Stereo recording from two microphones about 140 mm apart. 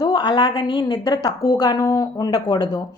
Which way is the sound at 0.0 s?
30° left (ahead or behind).